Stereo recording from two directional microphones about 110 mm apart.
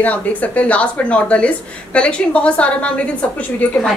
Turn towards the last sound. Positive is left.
turn(degrees=10)  # may be behind; listen again after turning